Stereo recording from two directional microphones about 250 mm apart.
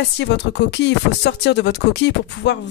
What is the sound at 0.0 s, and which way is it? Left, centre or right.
Speech, left.